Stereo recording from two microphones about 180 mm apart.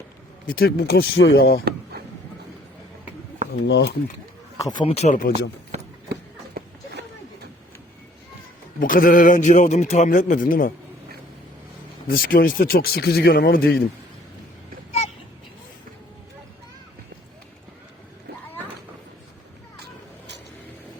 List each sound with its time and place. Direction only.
0.4 s speech: 55° left (ahead or behind)
3.5 s speech: 70° left (ahead or behind)
4.5 s speech: 20° left (ahead or behind); by 5.3 s 45° left (ahead or behind)
8.8 s a man's voice: 50° left (ahead or behind)
12.0 s speech: 55° left (ahead or behind)